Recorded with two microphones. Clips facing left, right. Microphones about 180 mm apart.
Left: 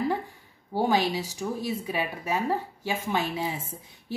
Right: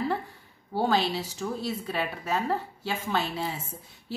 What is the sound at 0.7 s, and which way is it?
A woman's voice, 15° left (ahead or behind).